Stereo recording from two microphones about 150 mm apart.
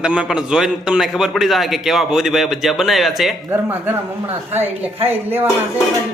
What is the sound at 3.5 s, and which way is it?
Speech, 15° right (ahead or behind).